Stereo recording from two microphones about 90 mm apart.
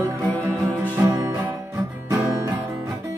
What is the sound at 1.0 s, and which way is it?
Music, 30° right (ahead or behind).